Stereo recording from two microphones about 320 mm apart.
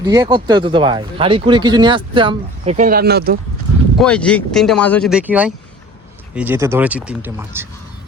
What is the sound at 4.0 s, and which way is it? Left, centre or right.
Speech, centre.